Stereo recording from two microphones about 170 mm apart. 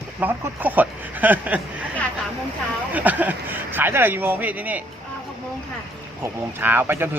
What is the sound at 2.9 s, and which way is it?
Speech, 10° right (ahead or behind).